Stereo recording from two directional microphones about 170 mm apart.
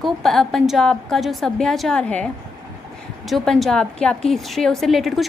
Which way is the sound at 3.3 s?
Centre (ahead or behind).